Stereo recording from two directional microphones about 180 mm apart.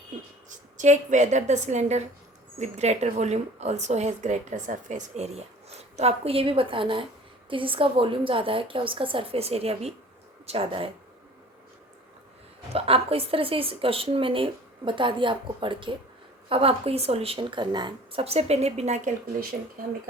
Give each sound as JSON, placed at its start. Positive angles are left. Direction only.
{"t": 0.8, "sound": "a woman's voice", "side_deg": -40}
{"t": 12.7, "sound": "a woman's voice", "side_deg": -30}